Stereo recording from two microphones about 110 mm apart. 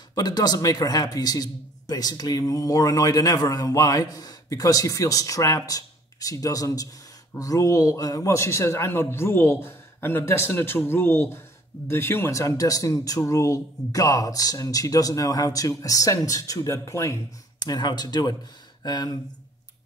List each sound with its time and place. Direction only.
0.1 s a man's voice: 35° left (ahead or behind)
17.6 s a man's voice: 40° left (ahead or behind)